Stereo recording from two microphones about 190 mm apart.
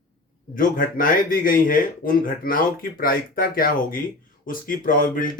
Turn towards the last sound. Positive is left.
turn(degrees=45)  # may be behind; listen again after turning